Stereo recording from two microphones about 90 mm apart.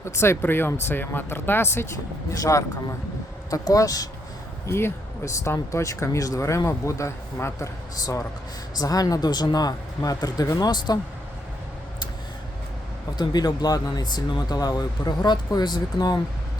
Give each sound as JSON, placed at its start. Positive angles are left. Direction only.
{"t": 0.0, "sound": "speech", "side_deg": 30}
{"t": 4.6, "sound": "speech", "side_deg": 30}
{"t": 8.8, "sound": "speech", "side_deg": 45}
{"t": 13.1, "sound": "speech", "side_deg": 50}